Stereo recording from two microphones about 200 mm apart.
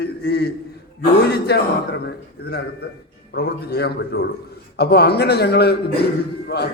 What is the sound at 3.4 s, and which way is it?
A man's voice, 55° left (ahead or behind).